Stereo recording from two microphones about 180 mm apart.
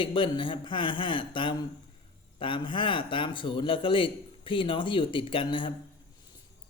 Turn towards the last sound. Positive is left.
turn(degrees=25)  # may be behind; listen again after turning